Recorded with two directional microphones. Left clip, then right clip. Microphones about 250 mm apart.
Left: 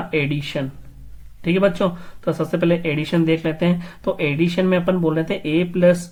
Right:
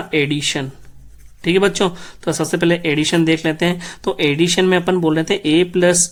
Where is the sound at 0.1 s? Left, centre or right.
Right.